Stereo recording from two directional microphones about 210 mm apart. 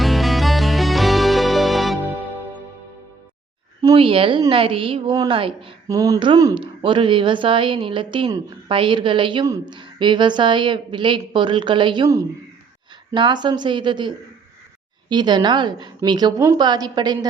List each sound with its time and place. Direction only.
0.0 s music: centre (ahead or behind)
3.8 s a woman's voice: 20° right (ahead or behind)
15.1 s a woman's voice: 20° right (ahead or behind)